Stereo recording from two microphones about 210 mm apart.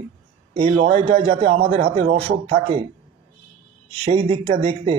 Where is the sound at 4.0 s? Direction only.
25° right (ahead or behind).